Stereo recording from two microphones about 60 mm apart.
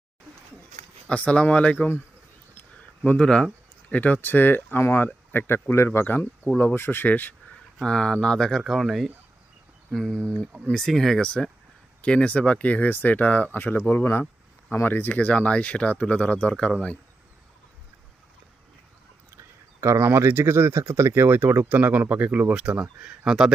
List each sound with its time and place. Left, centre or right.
1.0 s speech: left
3.2 s a sound: centre
3.9 s speech: left
6.1 s speech: left
7.8 s speech: centre
10.2 s speech: centre
12.0 s speech: centre
19.8 s speech: right
22.8 s speech: centre